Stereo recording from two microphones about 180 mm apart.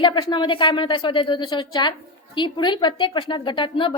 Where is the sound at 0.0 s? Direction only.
25° left (ahead or behind).